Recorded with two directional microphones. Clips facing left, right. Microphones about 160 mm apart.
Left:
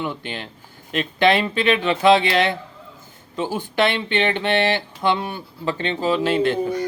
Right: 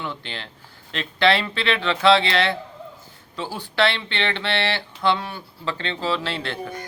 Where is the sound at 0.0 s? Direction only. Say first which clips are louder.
Left 4 dB; 15° left (ahead or behind).